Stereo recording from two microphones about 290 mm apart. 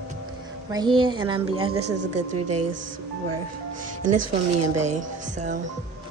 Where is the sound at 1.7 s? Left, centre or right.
Right.